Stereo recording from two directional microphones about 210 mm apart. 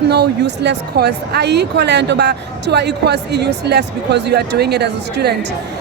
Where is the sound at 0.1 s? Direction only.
55° right (ahead or behind).